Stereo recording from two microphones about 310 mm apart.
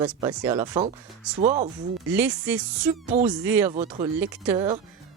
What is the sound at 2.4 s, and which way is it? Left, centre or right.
Speech, centre.